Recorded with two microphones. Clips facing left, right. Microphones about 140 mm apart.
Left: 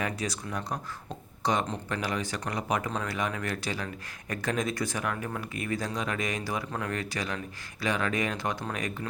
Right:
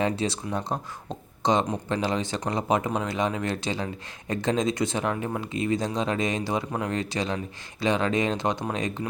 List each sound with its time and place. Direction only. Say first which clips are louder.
0.0 s speech: right 6 dB; 25° right (ahead or behind)